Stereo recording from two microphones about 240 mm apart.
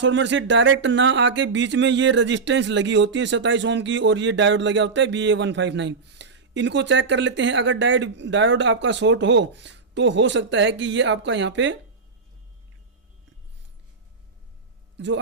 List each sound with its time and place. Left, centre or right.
0.0 s speech: right
14.9 s speech: right